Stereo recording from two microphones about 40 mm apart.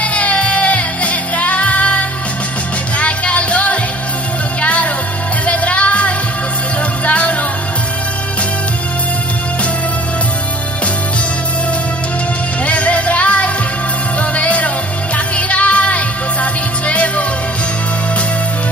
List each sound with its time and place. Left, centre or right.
0.0 s music: left
12.6 s music: left